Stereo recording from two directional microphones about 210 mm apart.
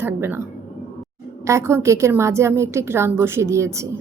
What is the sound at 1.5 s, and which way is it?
Speech, 15° right (ahead or behind).